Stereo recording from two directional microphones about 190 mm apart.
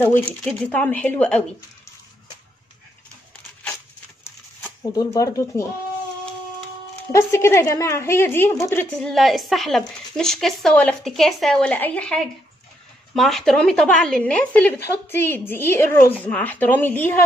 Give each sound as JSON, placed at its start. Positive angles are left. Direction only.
{"t": 0.0, "sound": "a woman's voice", "side_deg": 10}
{"t": 4.2, "sound": "a sound", "side_deg": 15}
{"t": 7.1, "sound": "a woman's voice", "side_deg": 15}
{"t": 8.9, "sound": "a woman's voice", "side_deg": 0}